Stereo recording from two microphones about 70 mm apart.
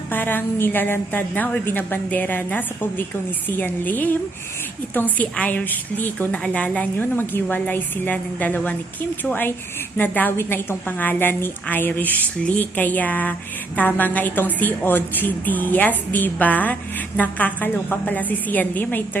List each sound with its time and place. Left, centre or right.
0.1 s a woman's voice: left